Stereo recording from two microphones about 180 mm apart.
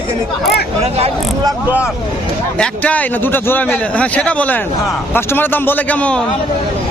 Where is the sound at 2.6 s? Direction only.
10° left (ahead or behind).